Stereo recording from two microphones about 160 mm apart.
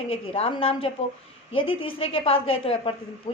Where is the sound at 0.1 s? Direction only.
35° left (ahead or behind).